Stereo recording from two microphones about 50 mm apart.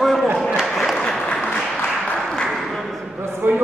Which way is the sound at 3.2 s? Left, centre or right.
Right.